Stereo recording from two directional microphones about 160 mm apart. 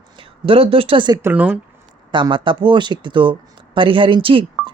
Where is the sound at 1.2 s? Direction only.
10° right (ahead or behind).